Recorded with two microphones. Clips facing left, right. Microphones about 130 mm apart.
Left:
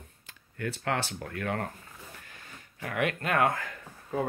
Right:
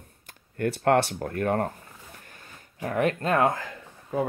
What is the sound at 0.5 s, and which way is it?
Speech, 60° right (ahead or behind).